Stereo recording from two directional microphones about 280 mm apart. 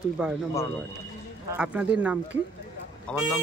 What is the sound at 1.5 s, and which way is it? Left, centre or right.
Speech, centre.